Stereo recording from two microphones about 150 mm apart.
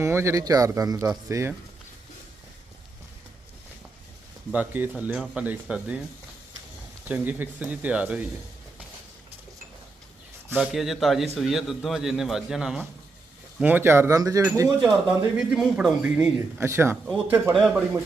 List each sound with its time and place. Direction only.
0.0 s speech: 15° right (ahead or behind)
4.5 s speech: 10° right (ahead or behind)
7.1 s speech: 10° right (ahead or behind)
10.5 s a man's voice: 5° right (ahead or behind); by 14.7 s 20° right (ahead or behind)
15.4 s speech: 5° right (ahead or behind)